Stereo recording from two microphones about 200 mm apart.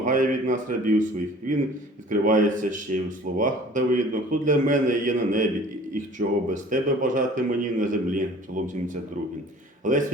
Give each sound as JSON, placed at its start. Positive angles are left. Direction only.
{"t": 0.0, "sound": "speech", "side_deg": -40}
{"t": 2.0, "sound": "speech", "side_deg": -40}
{"t": 9.8, "sound": "speech", "side_deg": -40}